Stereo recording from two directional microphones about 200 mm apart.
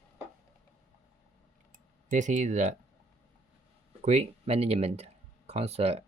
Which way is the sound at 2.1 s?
40° right (ahead or behind).